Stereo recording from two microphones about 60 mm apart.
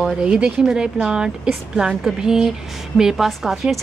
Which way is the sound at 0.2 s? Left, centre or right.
Centre.